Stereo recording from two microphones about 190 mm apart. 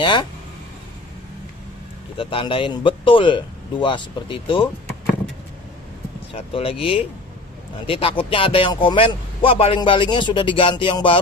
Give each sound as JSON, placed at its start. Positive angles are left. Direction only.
{"t": 0.0, "sound": "speech", "side_deg": 25}
{"t": 2.1, "sound": "speech", "side_deg": 25}
{"t": 6.3, "sound": "speech", "side_deg": 30}